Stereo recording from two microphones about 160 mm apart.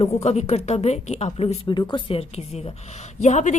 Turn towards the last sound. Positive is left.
turn(degrees=50)  # may be behind; listen again after turning